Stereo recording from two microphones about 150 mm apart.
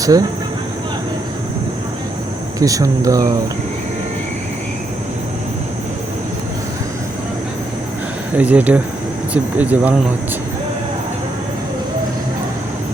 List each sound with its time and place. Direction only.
0.0 s speech: 25° right (ahead or behind)
2.6 s speech: 25° right (ahead or behind)
8.4 s speech: 10° right (ahead or behind)